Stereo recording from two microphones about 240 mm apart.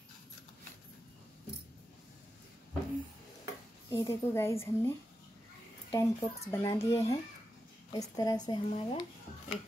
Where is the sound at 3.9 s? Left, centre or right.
Centre.